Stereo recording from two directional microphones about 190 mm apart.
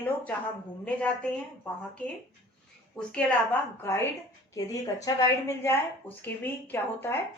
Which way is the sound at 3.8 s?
15° left (ahead or behind).